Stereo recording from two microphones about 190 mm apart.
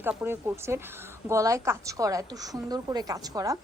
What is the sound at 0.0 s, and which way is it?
A woman's voice, 10° right (ahead or behind).